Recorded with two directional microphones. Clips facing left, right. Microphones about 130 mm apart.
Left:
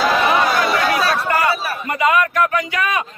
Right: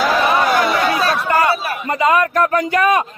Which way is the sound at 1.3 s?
30° right (ahead or behind).